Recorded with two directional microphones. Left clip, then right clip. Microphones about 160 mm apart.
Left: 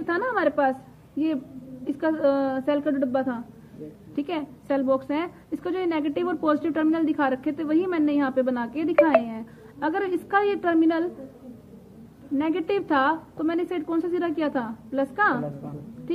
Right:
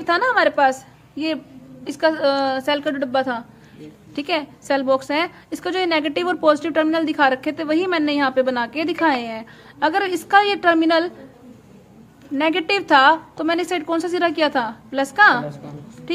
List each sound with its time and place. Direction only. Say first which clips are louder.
0.0 s a woman's voice: right 7 dB; 20° right (ahead or behind)
12.4 s a woman's voice: right 6 dB; 20° right (ahead or behind)